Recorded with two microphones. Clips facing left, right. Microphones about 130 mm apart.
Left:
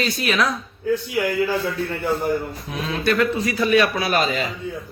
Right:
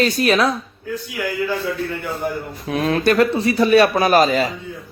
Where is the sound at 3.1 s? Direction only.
35° right (ahead or behind).